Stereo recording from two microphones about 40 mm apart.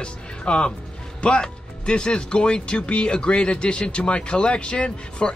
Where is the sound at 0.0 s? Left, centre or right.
Left.